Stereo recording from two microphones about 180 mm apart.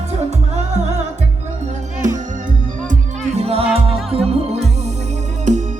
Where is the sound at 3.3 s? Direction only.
35° right (ahead or behind).